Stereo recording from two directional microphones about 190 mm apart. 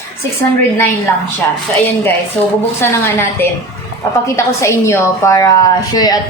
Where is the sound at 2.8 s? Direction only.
10° left (ahead or behind).